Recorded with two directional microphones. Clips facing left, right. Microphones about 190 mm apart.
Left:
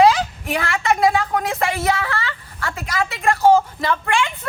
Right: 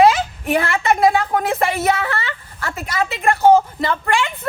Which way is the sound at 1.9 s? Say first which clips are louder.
Right 2 dB; 25° right (ahead or behind).